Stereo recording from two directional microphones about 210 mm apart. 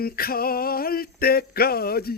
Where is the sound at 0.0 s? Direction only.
45° left (ahead or behind).